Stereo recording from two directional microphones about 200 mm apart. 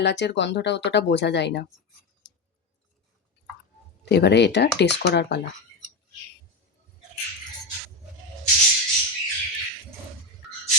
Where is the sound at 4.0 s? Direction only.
55° left (ahead or behind).